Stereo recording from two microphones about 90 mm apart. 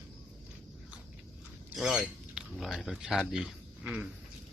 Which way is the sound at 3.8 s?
20° right (ahead or behind).